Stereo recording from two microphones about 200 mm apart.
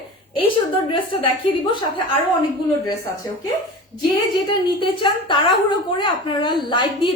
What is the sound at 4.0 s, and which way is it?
A woman's voice, 25° left (ahead or behind).